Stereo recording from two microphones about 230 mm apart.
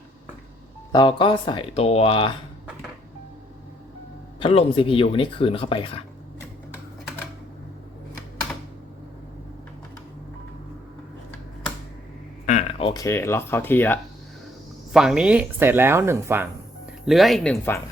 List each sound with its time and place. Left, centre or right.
0.9 s speech: left
4.4 s speech: left
12.5 s speech: left; by 14.0 s centre
14.9 s speech: centre